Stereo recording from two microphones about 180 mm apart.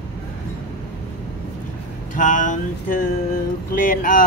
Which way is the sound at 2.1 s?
45° left (ahead or behind).